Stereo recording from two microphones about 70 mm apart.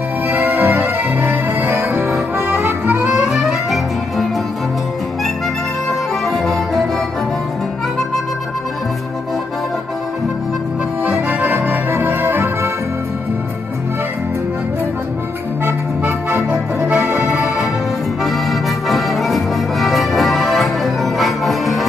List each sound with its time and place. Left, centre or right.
0.3 s music: right
2.1 s music: right
3.2 s music: centre
5.9 s music: centre
11.2 s music: right
15.6 s music: right
17.3 s music: centre
18.2 s accordion: centre